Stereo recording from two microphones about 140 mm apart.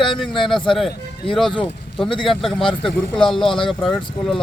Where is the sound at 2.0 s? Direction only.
35° left (ahead or behind).